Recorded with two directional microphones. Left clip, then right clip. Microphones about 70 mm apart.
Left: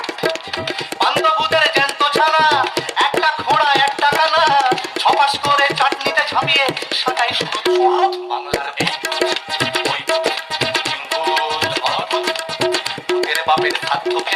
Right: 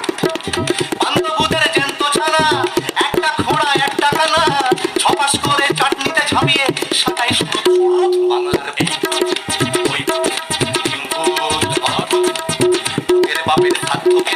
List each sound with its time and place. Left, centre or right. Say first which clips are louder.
0.9 s music: left 3 dB; right
11.3 s music: right 1 dB; right